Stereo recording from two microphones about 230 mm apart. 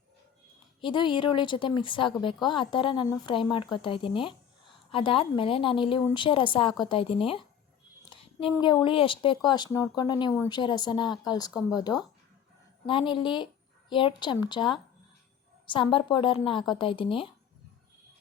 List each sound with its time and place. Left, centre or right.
0.8 s speech: centre